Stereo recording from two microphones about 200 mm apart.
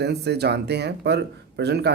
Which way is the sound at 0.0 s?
55° right (ahead or behind).